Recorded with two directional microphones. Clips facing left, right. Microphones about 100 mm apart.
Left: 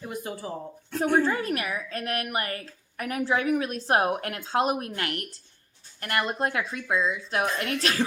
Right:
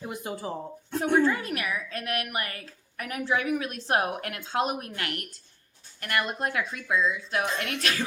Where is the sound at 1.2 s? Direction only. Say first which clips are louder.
Left 1 dB; 35° left (ahead or behind).